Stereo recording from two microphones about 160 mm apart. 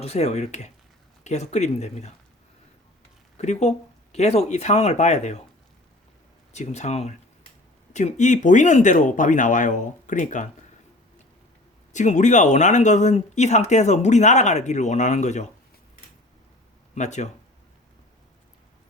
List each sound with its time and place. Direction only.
0.0 s speech: 45° left (ahead or behind)
3.3 s speech: 45° left (ahead or behind)
6.5 s speech: 45° left (ahead or behind)
11.9 s speech: 50° left (ahead or behind)
16.9 s speech: 45° left (ahead or behind)